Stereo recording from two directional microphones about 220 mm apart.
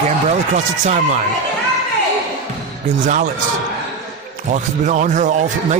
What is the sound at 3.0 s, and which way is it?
Speech, 35° right (ahead or behind).